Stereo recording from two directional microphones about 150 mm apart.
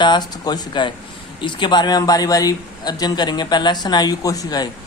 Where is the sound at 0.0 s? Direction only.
30° left (ahead or behind).